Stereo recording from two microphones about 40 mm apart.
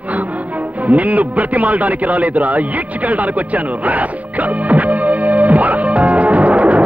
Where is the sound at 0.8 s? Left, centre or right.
Right.